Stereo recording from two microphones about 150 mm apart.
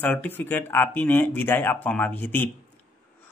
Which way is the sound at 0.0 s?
10° left (ahead or behind).